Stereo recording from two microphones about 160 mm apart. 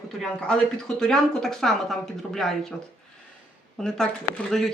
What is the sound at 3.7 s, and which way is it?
Speech, 5° left (ahead or behind).